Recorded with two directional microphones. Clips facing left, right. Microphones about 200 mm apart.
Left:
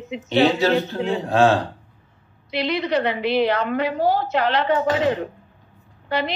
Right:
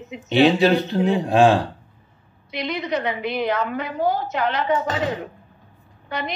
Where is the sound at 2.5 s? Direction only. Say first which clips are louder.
Left 4 dB; 30° left (ahead or behind).